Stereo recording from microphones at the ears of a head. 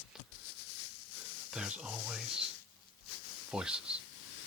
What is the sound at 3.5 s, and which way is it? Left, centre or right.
Speech, centre.